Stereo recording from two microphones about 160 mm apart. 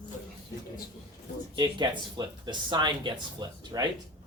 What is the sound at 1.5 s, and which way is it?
Speech, 30° right (ahead or behind).